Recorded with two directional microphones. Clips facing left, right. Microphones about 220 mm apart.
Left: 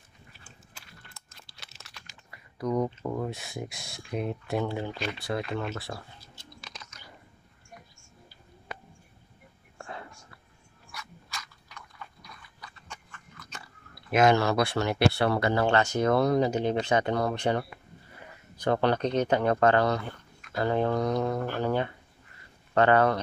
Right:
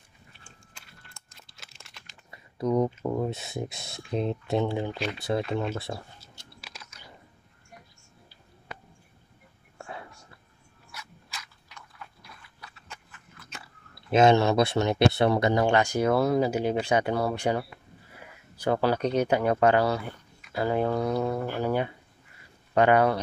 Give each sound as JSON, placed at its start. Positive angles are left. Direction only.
{"t": 0.4, "sound": "crunch", "side_deg": 5}
{"t": 2.3, "sound": "typing", "side_deg": -25}
{"t": 3.1, "sound": "speech", "side_deg": -20}
{"t": 4.9, "sound": "speech", "side_deg": 0}
{"t": 5.9, "sound": "speech", "side_deg": -20}
{"t": 6.5, "sound": "typing", "side_deg": -10}
{"t": 9.8, "sound": "whispering", "side_deg": -10}
{"t": 10.9, "sound": "a sound", "side_deg": -5}
{"t": 12.0, "sound": "biting", "side_deg": -5}
{"t": 14.1, "sound": "speech", "side_deg": -25}